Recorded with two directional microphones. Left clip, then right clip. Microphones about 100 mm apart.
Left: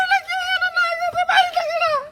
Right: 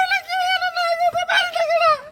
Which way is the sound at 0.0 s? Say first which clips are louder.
Even; 30° left (ahead or behind).